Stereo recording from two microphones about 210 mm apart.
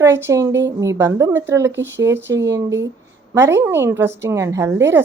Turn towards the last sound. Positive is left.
turn(degrees=-10)  # may be behind; listen again after turning